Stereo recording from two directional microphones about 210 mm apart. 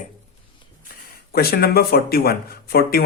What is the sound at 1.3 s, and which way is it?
Speech, 45° left (ahead or behind).